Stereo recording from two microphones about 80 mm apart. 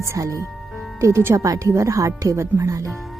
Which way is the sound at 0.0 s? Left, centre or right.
Right.